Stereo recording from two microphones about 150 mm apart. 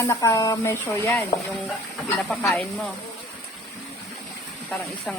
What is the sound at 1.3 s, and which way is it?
Speech, 80° left.